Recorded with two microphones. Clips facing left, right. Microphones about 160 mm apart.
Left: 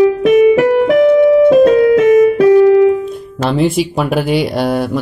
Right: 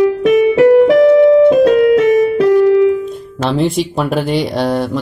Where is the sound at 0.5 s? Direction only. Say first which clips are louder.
Right 3 dB; 30° right (ahead or behind).